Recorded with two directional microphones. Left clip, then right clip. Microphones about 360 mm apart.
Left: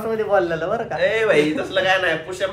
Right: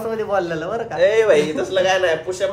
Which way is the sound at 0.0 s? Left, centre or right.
Centre.